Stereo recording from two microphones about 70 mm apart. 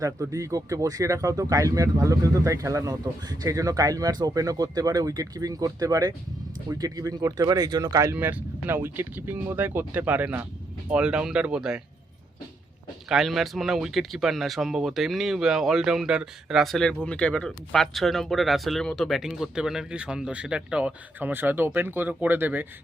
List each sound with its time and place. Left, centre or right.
0.0 s speech: right
8.0 s speech: right; by 11.8 s centre
13.1 s speech: centre
16.7 s speech: centre; by 22.6 s right